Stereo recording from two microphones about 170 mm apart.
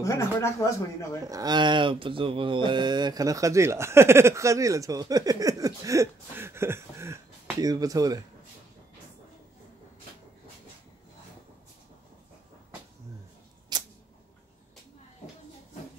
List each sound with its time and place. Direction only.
0.0 s speech: 15° left (ahead or behind)
1.2 s speech: 20° right (ahead or behind)
13.7 s a sound: 25° right (ahead or behind)